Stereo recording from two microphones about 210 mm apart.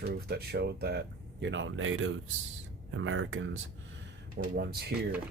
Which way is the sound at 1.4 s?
60° right (ahead or behind).